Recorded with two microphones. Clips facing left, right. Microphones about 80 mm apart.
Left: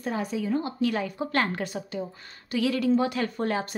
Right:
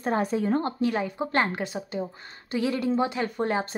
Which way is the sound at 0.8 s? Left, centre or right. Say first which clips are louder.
Right 1 dB; right.